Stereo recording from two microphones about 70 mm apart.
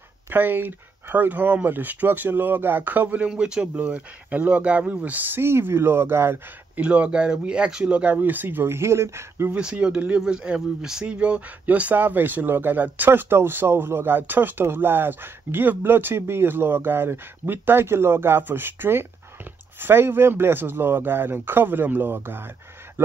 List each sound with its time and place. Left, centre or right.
0.3 s speech: right
3.3 s speech: centre; by 6.4 s right
6.8 s speech: centre; by 9.5 s right
9.5 s speech: centre; by 22.5 s right